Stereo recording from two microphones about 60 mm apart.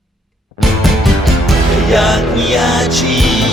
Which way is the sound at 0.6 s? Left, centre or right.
Centre.